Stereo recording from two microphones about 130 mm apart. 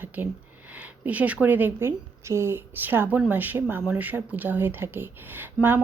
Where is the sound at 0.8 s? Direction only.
10° right (ahead or behind).